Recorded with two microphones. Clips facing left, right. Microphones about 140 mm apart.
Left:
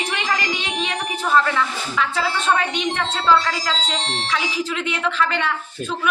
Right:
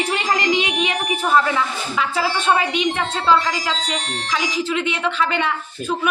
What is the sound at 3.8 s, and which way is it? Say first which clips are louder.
Speech: even; 30° left (ahead or behind).